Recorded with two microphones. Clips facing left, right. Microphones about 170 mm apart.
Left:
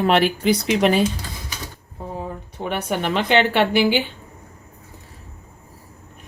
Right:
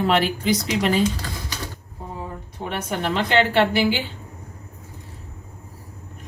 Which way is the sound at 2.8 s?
70° left (ahead or behind).